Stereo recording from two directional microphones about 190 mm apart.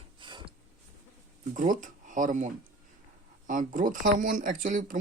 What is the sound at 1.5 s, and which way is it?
Speech, 45° right (ahead or behind).